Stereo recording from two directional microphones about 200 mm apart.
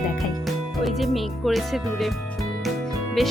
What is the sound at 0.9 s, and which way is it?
Music, centre (ahead or behind).